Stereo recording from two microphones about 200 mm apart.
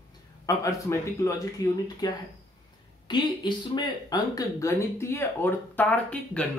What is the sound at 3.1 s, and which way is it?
Speech, 20° left (ahead or behind).